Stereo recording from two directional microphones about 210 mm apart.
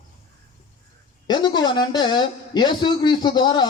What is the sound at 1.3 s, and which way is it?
Speech, 20° left (ahead or behind).